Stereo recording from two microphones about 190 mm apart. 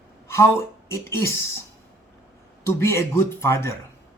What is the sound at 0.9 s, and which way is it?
Speech, 15° left (ahead or behind).